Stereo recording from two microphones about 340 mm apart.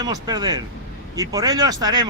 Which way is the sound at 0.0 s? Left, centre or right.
Centre.